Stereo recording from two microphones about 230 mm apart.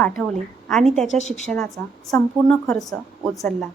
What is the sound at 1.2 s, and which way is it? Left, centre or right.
Speech, left.